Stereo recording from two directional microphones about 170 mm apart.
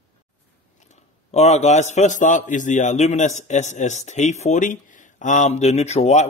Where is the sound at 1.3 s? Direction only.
40° left (ahead or behind).